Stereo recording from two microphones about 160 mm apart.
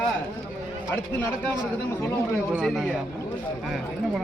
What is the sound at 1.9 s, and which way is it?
Speech, 15° left (ahead or behind).